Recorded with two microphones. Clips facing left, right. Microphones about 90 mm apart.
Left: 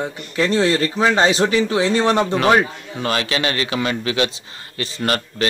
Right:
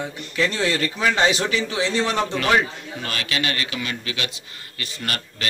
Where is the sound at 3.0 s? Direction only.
30° left (ahead or behind).